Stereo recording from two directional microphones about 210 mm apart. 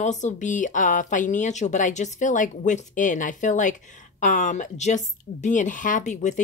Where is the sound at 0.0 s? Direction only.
35° left (ahead or behind).